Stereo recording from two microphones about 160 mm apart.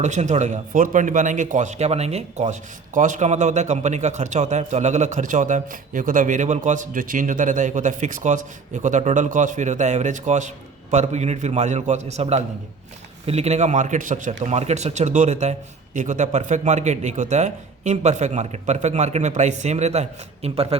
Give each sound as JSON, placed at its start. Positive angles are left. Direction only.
{"t": 0.0, "sound": "speech", "side_deg": -50}